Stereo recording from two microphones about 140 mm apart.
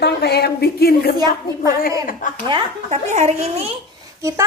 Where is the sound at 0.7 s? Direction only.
90° left.